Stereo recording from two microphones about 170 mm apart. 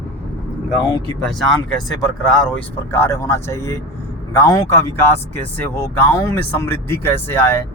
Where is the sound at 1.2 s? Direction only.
Centre (ahead or behind).